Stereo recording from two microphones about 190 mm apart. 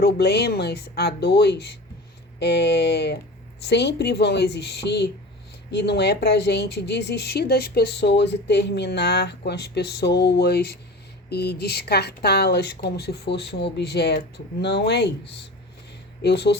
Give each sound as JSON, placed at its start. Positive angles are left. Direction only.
{"t": 0.0, "sound": "speech", "side_deg": 60}